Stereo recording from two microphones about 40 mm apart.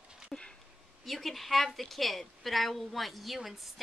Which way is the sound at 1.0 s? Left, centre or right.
Centre.